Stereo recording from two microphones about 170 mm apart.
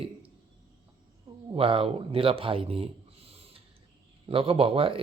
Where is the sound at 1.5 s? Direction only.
30° right (ahead or behind).